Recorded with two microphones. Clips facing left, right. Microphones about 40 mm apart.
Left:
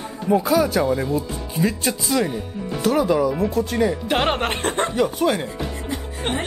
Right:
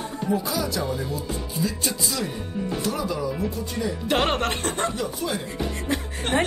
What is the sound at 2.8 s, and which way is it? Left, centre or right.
Speech, left.